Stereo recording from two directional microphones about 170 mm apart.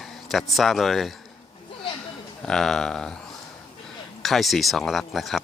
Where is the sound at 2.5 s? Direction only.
Centre (ahead or behind).